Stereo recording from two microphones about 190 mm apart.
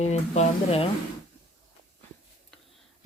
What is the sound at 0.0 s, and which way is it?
Speech, 35° left (ahead or behind).